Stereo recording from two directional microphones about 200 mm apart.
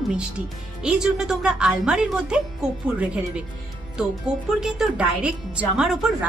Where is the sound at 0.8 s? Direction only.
5° right (ahead or behind).